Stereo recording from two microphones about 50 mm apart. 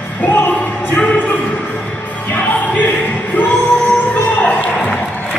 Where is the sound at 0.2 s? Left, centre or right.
Left.